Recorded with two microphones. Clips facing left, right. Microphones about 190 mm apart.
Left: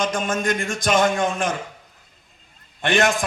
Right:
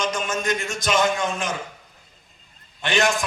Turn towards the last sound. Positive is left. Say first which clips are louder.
# left 3 dB
turn(degrees=55)  # may be behind; listen again after turning